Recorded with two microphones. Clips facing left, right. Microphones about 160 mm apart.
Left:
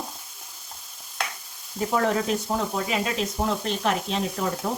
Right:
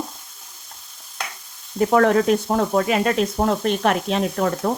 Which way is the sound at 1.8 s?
65° right (ahead or behind).